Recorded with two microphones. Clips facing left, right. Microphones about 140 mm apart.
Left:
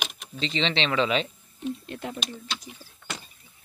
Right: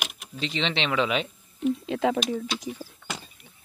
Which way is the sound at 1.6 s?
90° right.